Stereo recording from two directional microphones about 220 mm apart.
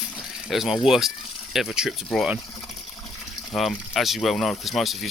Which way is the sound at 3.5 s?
Centre (ahead or behind).